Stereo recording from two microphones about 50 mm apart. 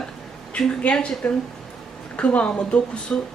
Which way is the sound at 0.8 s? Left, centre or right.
Left.